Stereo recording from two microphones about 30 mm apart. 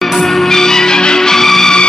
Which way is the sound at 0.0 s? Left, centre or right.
Centre.